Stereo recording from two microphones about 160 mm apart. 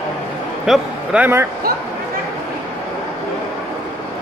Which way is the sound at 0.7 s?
10° right (ahead or behind).